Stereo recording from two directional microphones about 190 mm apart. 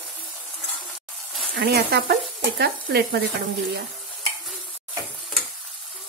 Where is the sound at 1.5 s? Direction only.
55° right (ahead or behind).